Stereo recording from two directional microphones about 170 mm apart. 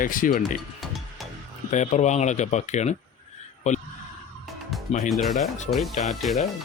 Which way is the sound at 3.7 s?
45° left (ahead or behind).